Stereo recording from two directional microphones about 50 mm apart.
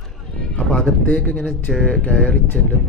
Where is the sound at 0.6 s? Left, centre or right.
Left.